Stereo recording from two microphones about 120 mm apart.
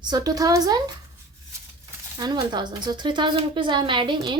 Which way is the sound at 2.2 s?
35° right (ahead or behind).